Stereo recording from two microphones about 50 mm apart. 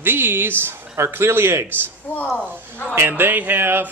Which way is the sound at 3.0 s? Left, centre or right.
Right.